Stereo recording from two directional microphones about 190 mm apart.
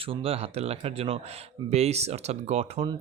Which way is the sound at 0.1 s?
30° right (ahead or behind).